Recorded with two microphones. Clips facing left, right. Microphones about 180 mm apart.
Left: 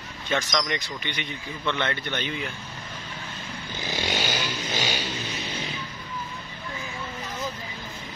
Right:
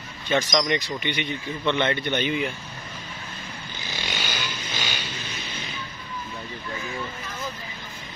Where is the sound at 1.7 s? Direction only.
20° right (ahead or behind).